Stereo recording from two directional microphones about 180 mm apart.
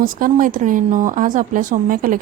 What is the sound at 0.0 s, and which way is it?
A woman's voice, 50° right (ahead or behind).